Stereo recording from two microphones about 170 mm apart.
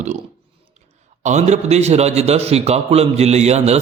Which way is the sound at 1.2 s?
40° right (ahead or behind).